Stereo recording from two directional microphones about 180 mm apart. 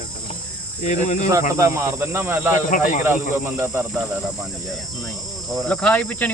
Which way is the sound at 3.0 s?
10° right (ahead or behind).